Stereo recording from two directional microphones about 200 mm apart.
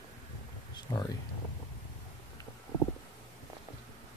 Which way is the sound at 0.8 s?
20° left (ahead or behind).